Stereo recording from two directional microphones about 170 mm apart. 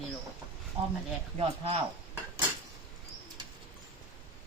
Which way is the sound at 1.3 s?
35° right (ahead or behind).